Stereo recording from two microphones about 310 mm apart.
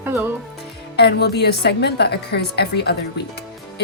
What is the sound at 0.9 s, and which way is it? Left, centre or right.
A woman's voice, left.